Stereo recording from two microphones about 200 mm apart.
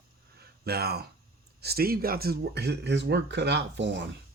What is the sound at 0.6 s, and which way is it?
Speech, 50° right (ahead or behind).